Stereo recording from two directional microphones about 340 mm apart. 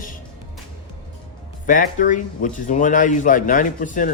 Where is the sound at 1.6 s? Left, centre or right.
Left.